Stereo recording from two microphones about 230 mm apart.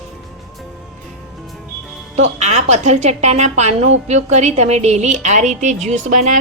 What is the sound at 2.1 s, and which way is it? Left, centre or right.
A woman's voice, right.